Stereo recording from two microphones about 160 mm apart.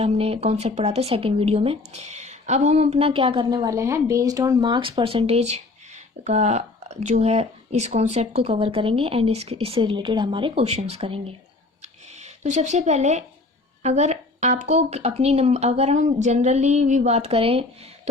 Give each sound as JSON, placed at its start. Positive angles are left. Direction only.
{"t": 0.0, "sound": "speech", "side_deg": -40}
{"t": 11.8, "sound": "a sound", "side_deg": -45}
{"t": 13.8, "sound": "speech", "side_deg": -45}